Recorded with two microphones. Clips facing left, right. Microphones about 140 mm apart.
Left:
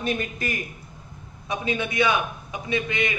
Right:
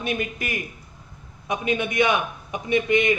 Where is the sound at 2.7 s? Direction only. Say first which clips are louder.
Right 6 dB; 20° right (ahead or behind).